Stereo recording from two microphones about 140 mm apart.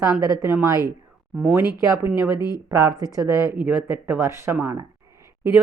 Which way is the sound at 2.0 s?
15° right (ahead or behind).